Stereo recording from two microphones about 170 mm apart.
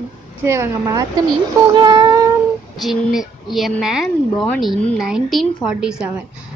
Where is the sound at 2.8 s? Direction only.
Centre (ahead or behind).